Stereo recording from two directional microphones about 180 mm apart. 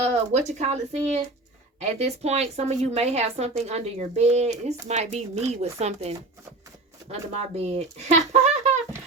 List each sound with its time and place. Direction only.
0.0 s speech: 40° right (ahead or behind)